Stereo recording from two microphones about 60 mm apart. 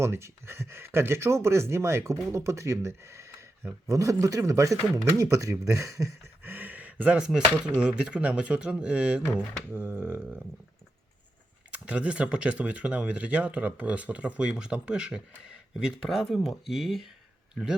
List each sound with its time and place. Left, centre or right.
0.0 s speech: right
6.4 s a sound: right
7.2 s speech: centre
9.7 s a sound: right
11.7 s speech: right
16.3 s a man's voice: centre